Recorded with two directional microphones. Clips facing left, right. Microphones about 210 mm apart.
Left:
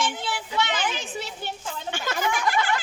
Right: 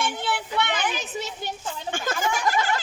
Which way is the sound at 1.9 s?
45° right (ahead or behind).